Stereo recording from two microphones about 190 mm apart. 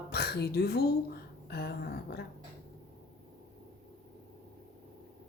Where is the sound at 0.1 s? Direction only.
60° left (ahead or behind).